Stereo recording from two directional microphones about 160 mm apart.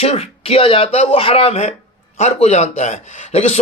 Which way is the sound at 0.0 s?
40° left (ahead or behind).